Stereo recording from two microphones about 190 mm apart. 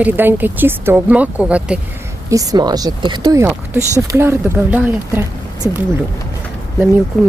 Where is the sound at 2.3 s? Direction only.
20° right (ahead or behind).